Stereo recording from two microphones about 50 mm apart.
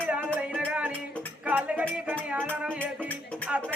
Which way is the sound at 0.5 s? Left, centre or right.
Right.